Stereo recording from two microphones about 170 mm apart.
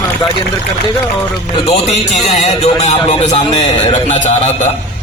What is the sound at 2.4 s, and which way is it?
A man's voice, 40° left (ahead or behind).